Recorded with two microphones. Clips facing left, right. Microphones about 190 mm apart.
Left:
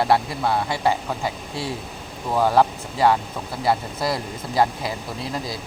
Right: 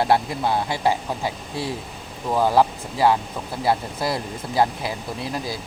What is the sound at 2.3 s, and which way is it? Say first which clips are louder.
Speech: even; 10° right (ahead or behind).